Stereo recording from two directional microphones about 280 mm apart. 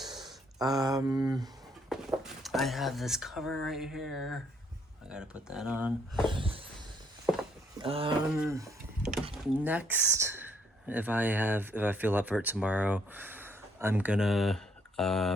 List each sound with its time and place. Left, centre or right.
0.6 s mantra: centre
1.9 s speech: centre
6.2 s dog: centre
7.8 s a sound: centre
8.3 s speech: centre